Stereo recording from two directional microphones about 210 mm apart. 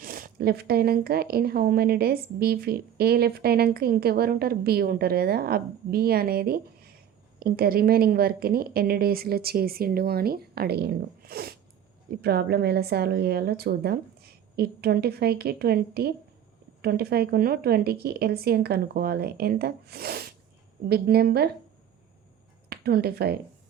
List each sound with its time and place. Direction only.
0.0 s speech: 45° right (ahead or behind)
22.7 s speech: 45° right (ahead or behind)